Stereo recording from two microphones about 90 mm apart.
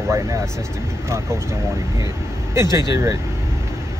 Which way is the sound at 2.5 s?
35° right (ahead or behind).